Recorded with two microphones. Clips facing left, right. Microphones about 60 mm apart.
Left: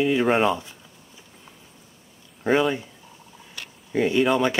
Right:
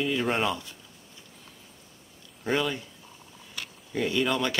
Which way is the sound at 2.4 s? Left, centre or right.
Centre.